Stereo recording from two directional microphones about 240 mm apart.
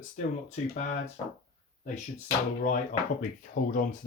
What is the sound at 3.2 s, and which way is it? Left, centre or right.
Speech, left.